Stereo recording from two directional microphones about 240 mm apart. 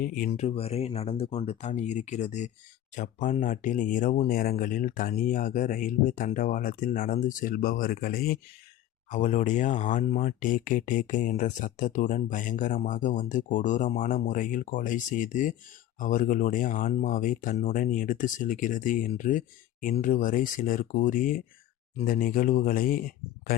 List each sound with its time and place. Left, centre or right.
0.0 s speech: left